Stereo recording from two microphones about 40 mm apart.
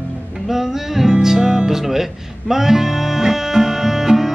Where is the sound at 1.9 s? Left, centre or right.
Centre.